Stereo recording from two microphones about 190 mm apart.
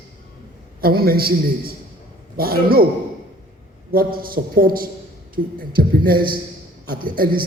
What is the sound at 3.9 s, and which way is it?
A man's voice, 50° right (ahead or behind).